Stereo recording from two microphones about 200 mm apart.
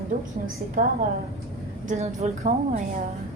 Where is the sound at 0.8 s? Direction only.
40° right (ahead or behind).